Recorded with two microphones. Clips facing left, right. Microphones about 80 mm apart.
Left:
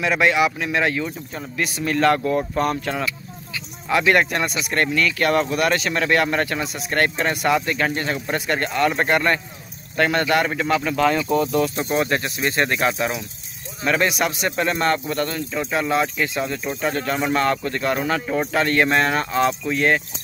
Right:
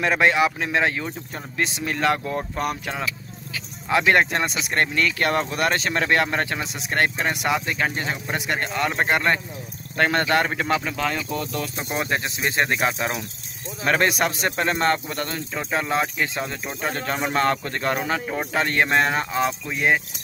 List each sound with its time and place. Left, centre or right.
0.0 s speech: right
1.8 s speech: centre
3.9 s speech: right
9.9 s speech: right
11.0 s speech: centre
11.9 s speech: centre
13.8 s speech: right; by 20.0 s centre